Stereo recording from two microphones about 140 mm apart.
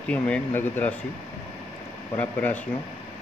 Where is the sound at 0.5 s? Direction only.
15° left (ahead or behind).